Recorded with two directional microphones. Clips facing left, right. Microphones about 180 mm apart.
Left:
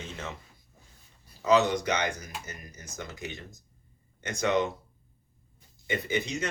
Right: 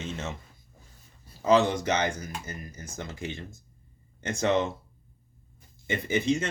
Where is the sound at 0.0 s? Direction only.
25° right (ahead or behind).